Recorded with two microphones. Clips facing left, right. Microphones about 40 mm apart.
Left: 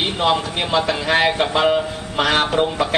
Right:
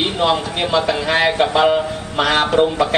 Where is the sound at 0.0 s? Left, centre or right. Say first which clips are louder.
Right 1 dB; centre.